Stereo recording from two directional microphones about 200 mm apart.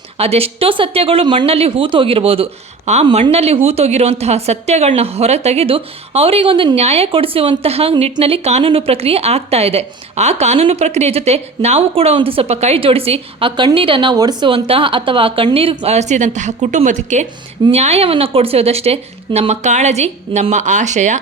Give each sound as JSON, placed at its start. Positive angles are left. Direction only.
{"t": 0.2, "sound": "speech", "side_deg": -30}